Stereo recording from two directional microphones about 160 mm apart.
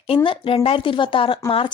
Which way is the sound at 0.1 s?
35° left (ahead or behind).